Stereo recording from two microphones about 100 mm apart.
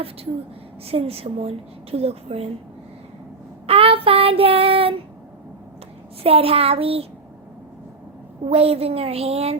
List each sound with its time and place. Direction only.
0.9 s a woman's voice: 75° right (ahead or behind)
3.7 s child singing: 70° right (ahead or behind)
6.2 s child singing: 75° right (ahead or behind)
8.4 s a woman's voice: 85° right